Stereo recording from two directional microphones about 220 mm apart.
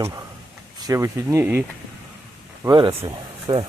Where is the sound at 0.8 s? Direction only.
15° right (ahead or behind).